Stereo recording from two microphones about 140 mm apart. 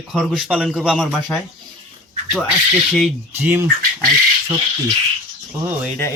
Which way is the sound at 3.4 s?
15° right (ahead or behind).